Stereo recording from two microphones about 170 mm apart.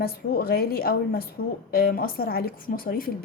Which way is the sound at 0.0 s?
65° left (ahead or behind).